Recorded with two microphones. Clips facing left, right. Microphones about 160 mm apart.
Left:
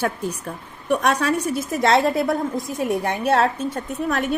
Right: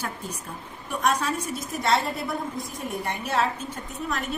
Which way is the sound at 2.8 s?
70° left (ahead or behind).